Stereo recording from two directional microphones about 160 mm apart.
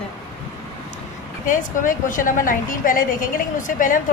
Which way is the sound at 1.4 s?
55° left (ahead or behind).